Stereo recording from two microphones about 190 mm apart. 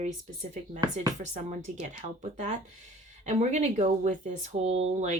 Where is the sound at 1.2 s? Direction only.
40° right (ahead or behind).